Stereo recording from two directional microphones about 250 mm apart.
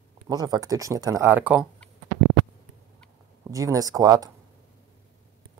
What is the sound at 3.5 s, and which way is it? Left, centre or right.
Speech, centre.